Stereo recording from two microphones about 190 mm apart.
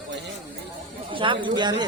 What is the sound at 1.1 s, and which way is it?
Speech, 25° right (ahead or behind).